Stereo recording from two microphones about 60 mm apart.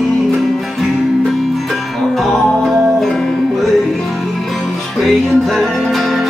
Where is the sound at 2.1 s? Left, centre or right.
Centre.